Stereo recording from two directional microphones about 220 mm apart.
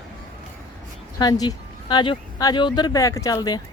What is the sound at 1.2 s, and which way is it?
Speech, 20° left (ahead or behind).